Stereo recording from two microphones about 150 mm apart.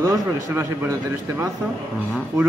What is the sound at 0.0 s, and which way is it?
A man's voice, 20° right (ahead or behind).